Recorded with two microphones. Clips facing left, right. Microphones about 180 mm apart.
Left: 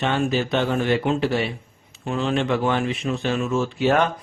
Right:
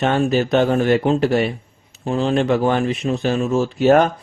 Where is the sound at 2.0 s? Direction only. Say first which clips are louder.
Right 5 dB; 35° right (ahead or behind).